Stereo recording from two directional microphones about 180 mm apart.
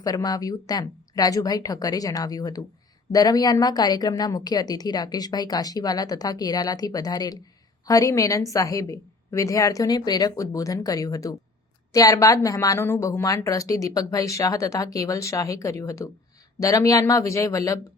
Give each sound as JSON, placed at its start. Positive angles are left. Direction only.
{"t": 0.0, "sound": "a woman's voice", "side_deg": 20}